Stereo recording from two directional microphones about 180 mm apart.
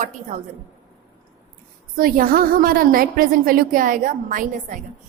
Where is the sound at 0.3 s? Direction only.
40° right (ahead or behind).